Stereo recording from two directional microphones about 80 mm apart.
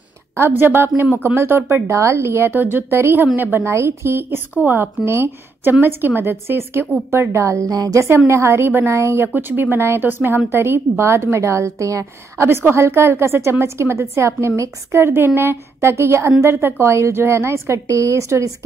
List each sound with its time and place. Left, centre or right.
0.4 s a woman's voice: right
8.3 s a woman's voice: right